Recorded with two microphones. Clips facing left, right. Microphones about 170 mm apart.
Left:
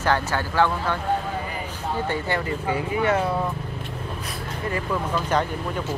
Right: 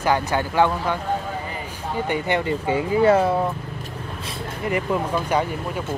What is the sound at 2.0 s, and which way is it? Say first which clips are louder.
Speech: right 6 dB; 20° right (ahead or behind).